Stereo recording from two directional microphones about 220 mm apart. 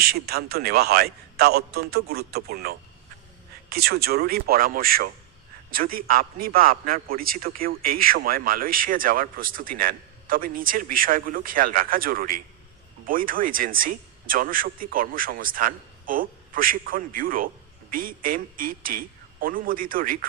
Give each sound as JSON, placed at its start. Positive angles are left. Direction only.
{"t": 0.0, "sound": "a man's voice", "side_deg": -45}